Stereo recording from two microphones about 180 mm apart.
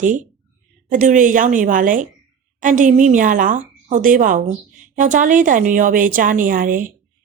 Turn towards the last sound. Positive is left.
turn(degrees=-50)  # may be behind; listen again after turning